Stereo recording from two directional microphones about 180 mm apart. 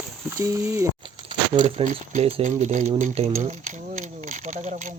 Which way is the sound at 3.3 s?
45° right (ahead or behind).